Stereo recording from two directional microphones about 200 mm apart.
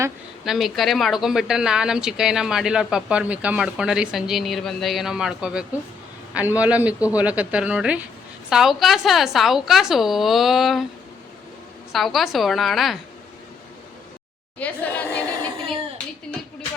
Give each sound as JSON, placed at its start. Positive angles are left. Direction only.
{"t": 0.4, "sound": "a man's voice", "side_deg": 0}
{"t": 11.9, "sound": "speech", "side_deg": 0}
{"t": 14.6, "sound": "a woman's voice", "side_deg": 5}